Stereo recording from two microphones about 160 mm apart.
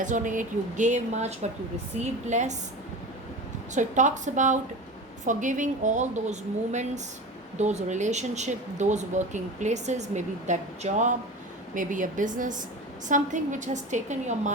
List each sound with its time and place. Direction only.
0.0 s speech: 50° right (ahead or behind)
3.8 s speech: 50° right (ahead or behind)